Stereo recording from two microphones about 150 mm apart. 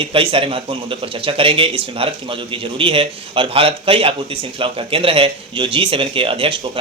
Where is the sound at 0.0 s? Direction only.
35° right (ahead or behind).